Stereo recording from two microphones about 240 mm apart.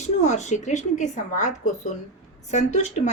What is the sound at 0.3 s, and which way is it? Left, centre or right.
A woman's voice, left.